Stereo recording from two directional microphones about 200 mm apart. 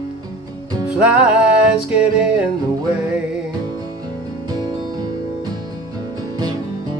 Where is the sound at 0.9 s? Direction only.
5° right (ahead or behind).